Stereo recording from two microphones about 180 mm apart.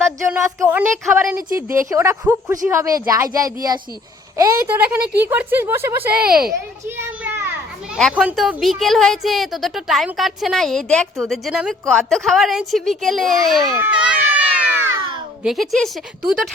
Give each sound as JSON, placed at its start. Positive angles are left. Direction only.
{"t": 0.3, "sound": "a woman's voice", "side_deg": -15}
{"t": 6.1, "sound": "speech", "side_deg": -55}
{"t": 6.5, "sound": "a child's voice", "side_deg": -15}
{"t": 15.4, "sound": "a woman's voice", "side_deg": 0}